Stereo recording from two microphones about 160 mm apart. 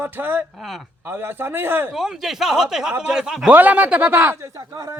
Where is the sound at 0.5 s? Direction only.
Centre (ahead or behind).